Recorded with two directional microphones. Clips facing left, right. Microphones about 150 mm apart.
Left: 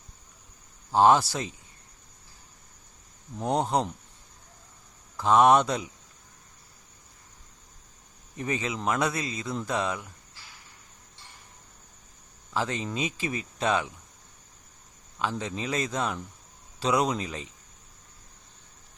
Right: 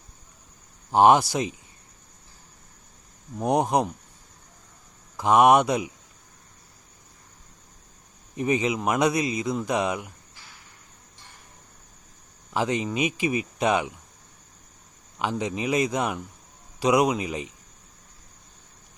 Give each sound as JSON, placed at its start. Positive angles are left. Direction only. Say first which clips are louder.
{"t": 0.9, "sound": "a man's voice", "louder": "right 3 dB", "side_deg": -15}
{"t": 3.3, "sound": "a man's voice", "louder": "right 4 dB", "side_deg": -15}
{"t": 5.1, "sound": "a man's voice", "louder": "right 2 dB", "side_deg": -15}
{"t": 8.4, "sound": "a man's voice", "louder": "right 7 dB", "side_deg": -15}
{"t": 12.5, "sound": "a man's voice", "louder": "right 5 dB", "side_deg": -15}
{"t": 15.2, "sound": "a man's voice", "louder": "right 4 dB", "side_deg": -15}